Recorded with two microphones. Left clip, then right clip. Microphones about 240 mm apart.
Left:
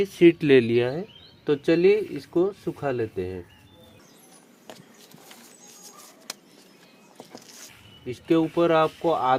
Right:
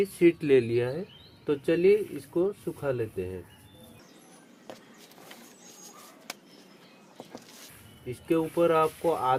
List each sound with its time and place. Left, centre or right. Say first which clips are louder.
0.0 s speech: left 5 dB; left
7.2 s a sound: left 2 dB; centre
8.0 s speech: left 5 dB; left